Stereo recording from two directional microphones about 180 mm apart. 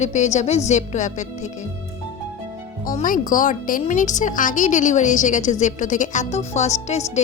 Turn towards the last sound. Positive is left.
turn(degrees=40)  # may be behind; listen again after turning